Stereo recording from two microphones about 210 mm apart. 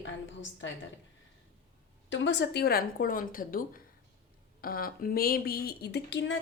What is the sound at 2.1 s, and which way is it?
A woman's voice, 60° left (ahead or behind).